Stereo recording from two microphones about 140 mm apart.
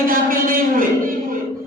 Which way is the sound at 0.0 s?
90° right.